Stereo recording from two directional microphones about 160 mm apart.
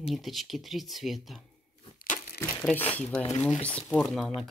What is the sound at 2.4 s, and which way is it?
Speech, 10° left (ahead or behind).